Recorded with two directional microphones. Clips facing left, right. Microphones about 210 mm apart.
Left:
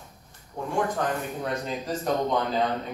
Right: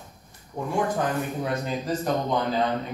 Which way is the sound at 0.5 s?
20° right (ahead or behind).